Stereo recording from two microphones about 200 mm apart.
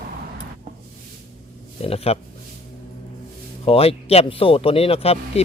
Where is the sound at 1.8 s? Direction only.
30° left (ahead or behind).